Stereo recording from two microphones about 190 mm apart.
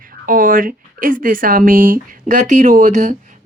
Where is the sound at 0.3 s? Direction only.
45° right (ahead or behind).